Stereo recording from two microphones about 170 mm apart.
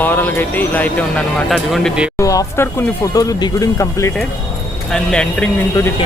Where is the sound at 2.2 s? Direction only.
20° left (ahead or behind).